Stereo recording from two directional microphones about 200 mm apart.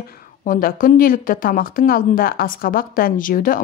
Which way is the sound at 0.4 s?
45° left (ahead or behind).